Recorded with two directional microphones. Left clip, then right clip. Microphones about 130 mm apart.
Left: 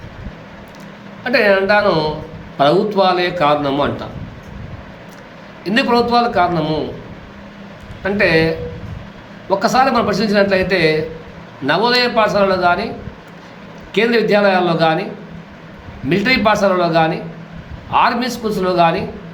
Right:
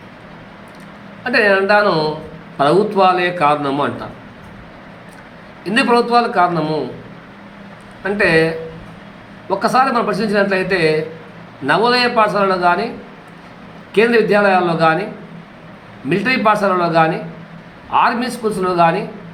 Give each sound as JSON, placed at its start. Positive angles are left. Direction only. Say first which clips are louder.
{"t": 1.2, "sound": "a man's voice", "louder": "even", "side_deg": 15}
{"t": 5.6, "sound": "a man's voice", "louder": "right 1 dB", "side_deg": 15}
{"t": 8.0, "sound": "a man's voice", "louder": "even", "side_deg": 15}
{"t": 13.9, "sound": "a man's voice", "louder": "right 1 dB", "side_deg": 15}
{"t": 16.0, "sound": "a man's voice", "louder": "left 1 dB", "side_deg": 15}